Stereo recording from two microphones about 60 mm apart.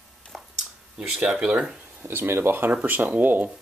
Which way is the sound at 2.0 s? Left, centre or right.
Right.